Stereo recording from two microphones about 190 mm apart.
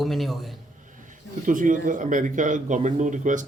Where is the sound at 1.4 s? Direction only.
45° right (ahead or behind).